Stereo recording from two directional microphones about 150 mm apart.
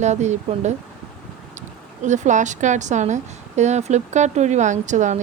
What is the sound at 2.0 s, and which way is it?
Speech, 55° right (ahead or behind).